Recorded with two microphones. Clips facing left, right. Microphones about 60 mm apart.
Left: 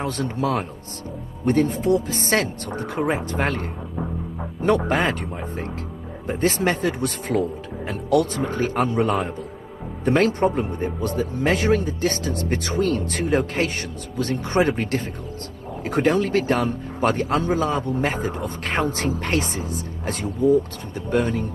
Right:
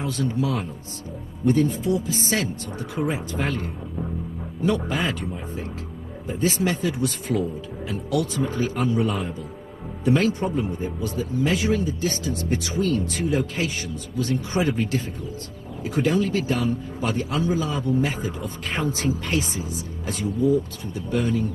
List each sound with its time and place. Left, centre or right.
0.0 s a man's voice: left